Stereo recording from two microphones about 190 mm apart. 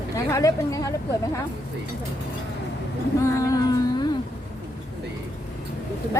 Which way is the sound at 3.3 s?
15° left (ahead or behind).